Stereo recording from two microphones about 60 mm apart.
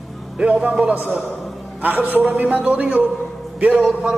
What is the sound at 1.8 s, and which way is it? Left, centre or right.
A man's voice, right.